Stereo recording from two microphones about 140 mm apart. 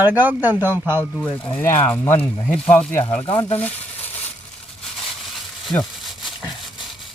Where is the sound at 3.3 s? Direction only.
45° left (ahead or behind).